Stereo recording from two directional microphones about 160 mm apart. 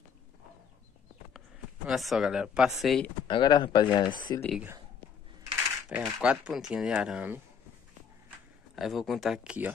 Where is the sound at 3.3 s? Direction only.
30° left (ahead or behind).